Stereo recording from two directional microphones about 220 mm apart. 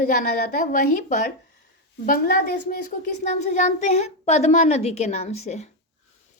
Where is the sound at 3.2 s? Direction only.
30° left (ahead or behind).